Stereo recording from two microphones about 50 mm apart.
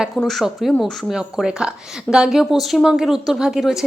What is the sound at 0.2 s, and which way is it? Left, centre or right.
Speech, centre.